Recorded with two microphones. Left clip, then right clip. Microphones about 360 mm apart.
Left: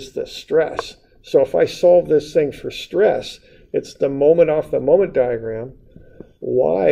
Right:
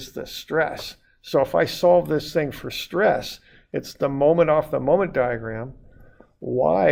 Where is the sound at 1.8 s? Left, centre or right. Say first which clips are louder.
Left 6 dB; right.